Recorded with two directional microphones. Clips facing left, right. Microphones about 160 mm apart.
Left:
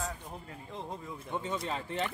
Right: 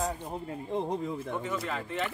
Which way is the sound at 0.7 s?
65° right (ahead or behind).